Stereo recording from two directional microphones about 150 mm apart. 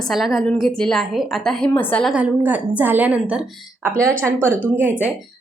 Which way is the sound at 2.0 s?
5° right (ahead or behind).